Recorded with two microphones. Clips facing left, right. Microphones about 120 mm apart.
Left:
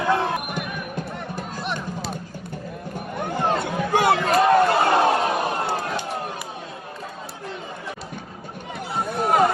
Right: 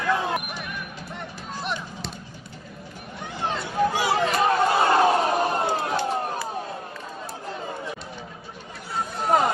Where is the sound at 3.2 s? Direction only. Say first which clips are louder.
Left 6 dB; 50° left (ahead or behind).